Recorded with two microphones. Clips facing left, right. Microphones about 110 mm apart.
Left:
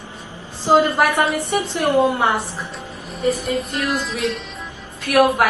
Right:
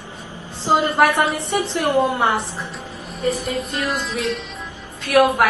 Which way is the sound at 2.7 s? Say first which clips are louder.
Left 1 dB; centre (ahead or behind).